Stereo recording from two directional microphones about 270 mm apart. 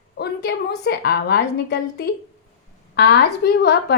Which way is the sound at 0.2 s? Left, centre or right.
Left.